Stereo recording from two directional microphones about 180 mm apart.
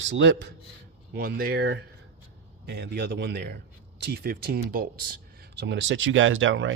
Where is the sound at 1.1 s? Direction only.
60° right (ahead or behind).